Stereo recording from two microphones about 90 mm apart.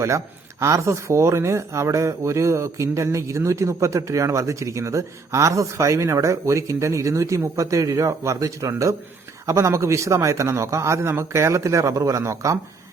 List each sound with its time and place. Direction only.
0.6 s speech: 35° right (ahead or behind)